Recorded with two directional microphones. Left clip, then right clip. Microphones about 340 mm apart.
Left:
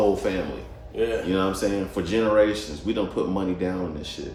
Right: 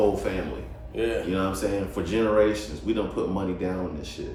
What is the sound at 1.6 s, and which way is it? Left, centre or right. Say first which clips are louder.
Speech: left 2 dB; left.